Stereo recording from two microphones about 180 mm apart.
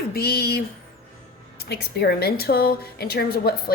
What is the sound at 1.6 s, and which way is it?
A woman's voice, 60° left (ahead or behind).